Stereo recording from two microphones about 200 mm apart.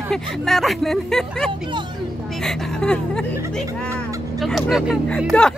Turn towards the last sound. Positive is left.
turn(degrees=0)  # may be behind; listen again after turning